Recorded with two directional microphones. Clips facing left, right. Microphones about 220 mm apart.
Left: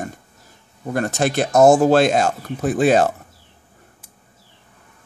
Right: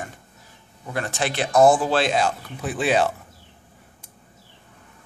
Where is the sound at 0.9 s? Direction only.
45° left (ahead or behind).